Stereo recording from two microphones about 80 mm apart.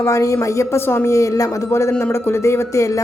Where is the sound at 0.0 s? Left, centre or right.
Left.